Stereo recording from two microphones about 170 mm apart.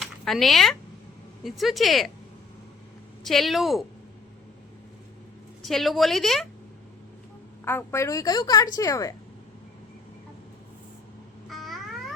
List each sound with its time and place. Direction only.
0.0 s speech: centre (ahead or behind)
3.2 s speech: centre (ahead or behind)
5.6 s speech: centre (ahead or behind)
7.6 s a woman's voice: 15° left (ahead or behind)
11.4 s babbling: centre (ahead or behind)